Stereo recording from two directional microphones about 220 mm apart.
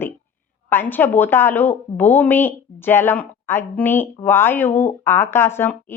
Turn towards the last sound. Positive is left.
turn(degrees=10)  # may be behind; listen again after turning